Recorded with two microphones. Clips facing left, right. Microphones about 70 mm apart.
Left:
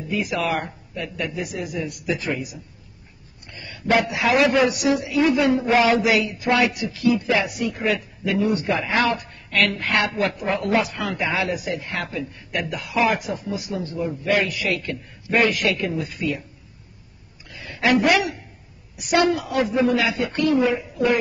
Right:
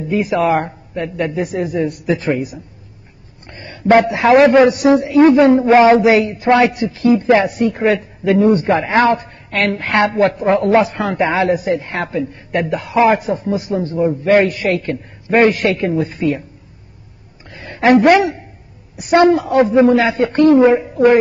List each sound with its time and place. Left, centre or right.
0.1 s a man's voice: right
17.5 s a sound: right
18.9 s a man's voice: right